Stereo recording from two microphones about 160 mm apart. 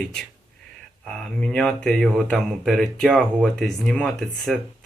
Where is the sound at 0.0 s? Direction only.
5° left (ahead or behind).